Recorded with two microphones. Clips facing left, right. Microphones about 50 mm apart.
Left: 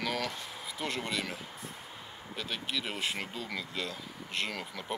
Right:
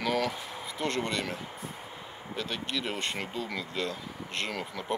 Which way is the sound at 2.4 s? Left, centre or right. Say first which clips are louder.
Right 3 dB; centre.